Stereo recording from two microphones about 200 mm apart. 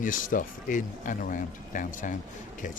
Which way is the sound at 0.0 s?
40° left (ahead or behind).